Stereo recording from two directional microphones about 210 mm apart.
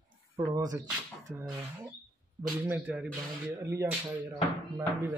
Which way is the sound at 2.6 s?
5° right (ahead or behind).